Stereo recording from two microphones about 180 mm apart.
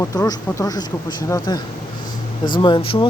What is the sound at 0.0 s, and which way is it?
Speech, 20° left (ahead or behind).